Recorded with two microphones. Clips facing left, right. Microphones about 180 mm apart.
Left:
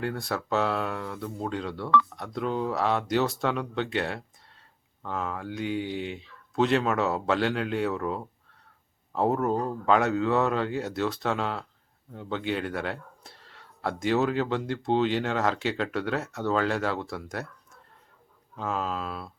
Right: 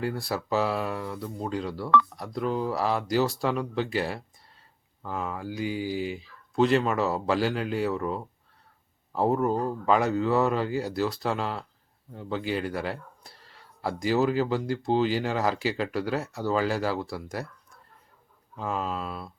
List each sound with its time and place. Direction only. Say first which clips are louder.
0.0 s speech: right 1 dB; centre (ahead or behind)
18.5 s speech: even; centre (ahead or behind)